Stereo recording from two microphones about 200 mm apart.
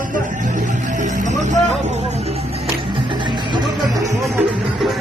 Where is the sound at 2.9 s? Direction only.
25° right (ahead or behind).